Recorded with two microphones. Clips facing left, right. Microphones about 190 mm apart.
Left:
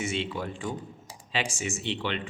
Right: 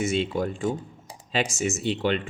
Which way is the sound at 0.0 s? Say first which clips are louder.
Right 6 dB; 40° right (ahead or behind).